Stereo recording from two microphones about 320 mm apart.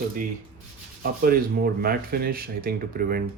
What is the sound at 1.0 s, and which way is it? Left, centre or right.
Speech, right.